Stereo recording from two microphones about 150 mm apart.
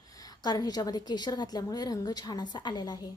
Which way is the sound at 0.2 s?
25° left (ahead or behind).